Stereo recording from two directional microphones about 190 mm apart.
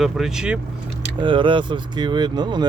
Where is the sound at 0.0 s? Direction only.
Centre (ahead or behind).